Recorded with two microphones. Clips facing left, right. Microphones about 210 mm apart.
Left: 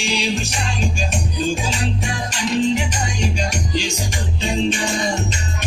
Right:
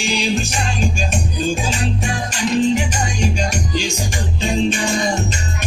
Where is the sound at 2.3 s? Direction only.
45° right (ahead or behind).